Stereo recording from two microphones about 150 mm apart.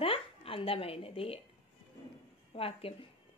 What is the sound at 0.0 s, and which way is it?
Speech, 40° left (ahead or behind).